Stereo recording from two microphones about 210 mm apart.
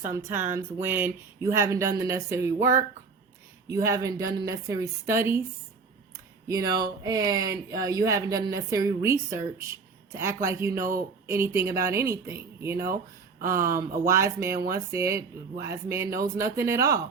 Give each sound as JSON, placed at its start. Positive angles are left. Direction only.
{"t": 0.0, "sound": "speech", "side_deg": -15}
{"t": 13.4, "sound": "speech", "side_deg": -45}
{"t": 14.1, "sound": "speech", "side_deg": -15}